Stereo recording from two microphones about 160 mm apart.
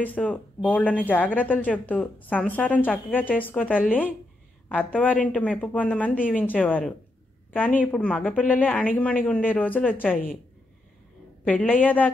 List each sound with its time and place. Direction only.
0.0 s a woman's voice: 10° left (ahead or behind)
11.4 s a woman's voice: 10° left (ahead or behind)